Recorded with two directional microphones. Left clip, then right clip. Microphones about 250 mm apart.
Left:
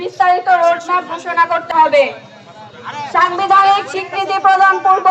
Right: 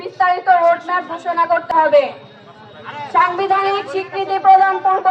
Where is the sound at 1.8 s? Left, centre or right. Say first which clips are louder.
Left 6 dB; left.